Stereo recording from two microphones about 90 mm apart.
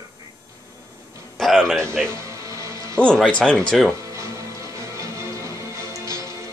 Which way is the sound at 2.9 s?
10° left (ahead or behind).